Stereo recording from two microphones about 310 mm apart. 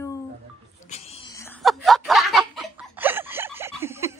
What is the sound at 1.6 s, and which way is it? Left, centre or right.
Snicker, centre.